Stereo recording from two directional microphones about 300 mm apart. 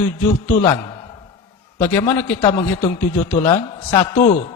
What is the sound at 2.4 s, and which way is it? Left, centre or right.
Speech, left.